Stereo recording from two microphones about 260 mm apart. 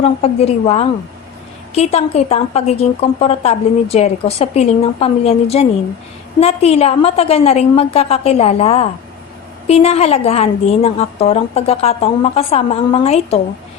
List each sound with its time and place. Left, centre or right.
0.0 s a woman's voice: left